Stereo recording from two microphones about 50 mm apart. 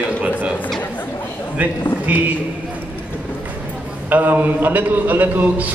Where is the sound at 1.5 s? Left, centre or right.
Right.